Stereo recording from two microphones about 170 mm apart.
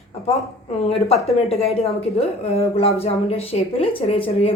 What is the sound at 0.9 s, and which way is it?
A woman's voice, 35° left (ahead or behind).